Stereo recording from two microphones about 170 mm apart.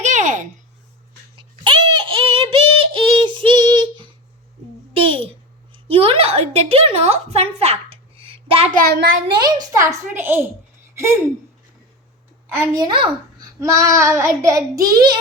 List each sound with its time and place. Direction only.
0.0 s a sound: 45° right (ahead or behind)
1.6 s a sound: 30° right (ahead or behind)
3.4 s child singing: 25° right (ahead or behind)
4.9 s babbling: 30° right (ahead or behind)
5.7 s a sound: 35° right (ahead or behind)
8.7 s a child's voice: 65° right (ahead or behind)
9.2 s a child's voice: 25° right (ahead or behind)
12.5 s a child's voice: 15° right (ahead or behind)
12.8 s a child's voice: 25° right (ahead or behind)